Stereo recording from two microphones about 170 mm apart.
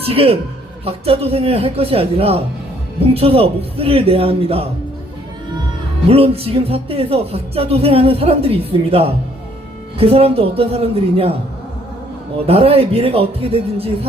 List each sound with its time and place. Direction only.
0.0 s speech: 35° right (ahead or behind)
6.1 s speech: 35° right (ahead or behind)
12.5 s speech: 35° right (ahead or behind)